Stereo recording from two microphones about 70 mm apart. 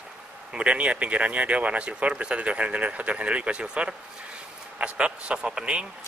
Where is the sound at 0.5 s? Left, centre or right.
Centre.